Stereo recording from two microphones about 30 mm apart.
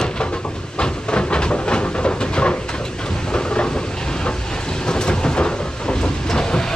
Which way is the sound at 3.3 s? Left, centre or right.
Left.